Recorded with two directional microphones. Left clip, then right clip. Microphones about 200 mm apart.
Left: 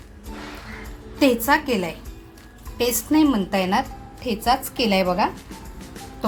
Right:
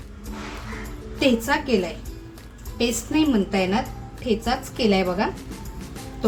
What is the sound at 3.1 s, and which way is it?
A woman's voice, 45° left (ahead or behind).